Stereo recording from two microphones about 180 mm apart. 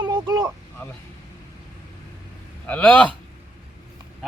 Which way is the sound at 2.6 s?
10° left (ahead or behind).